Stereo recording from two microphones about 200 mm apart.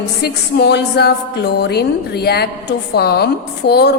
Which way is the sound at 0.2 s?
55° left (ahead or behind).